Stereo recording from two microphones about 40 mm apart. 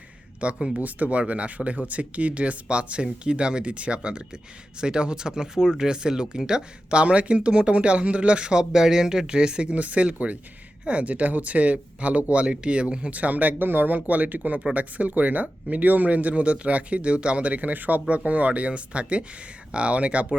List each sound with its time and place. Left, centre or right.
0.4 s speech: right
0.8 s speech: right
9.7 s speech: right
13.1 s speech: right
18.1 s speech: right